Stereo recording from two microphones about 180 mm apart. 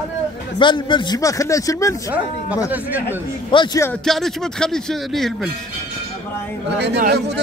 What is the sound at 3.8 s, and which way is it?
Speech, 5° left (ahead or behind).